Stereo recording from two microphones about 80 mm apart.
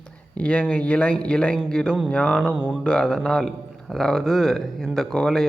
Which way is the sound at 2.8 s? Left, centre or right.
Centre.